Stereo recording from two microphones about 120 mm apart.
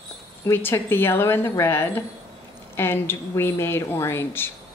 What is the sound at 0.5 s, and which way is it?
Speech, 20° left (ahead or behind).